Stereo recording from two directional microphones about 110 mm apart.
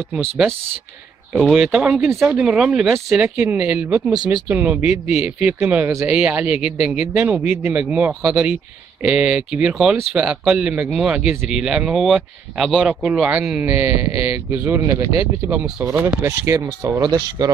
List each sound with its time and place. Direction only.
1.3 s speech: 5° right (ahead or behind)
13.6 s speech: 15° right (ahead or behind)